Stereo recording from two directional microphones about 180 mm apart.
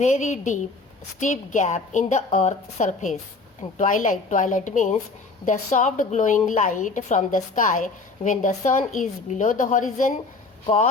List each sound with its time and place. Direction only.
0.0 s a woman's voice: 45° left (ahead or behind)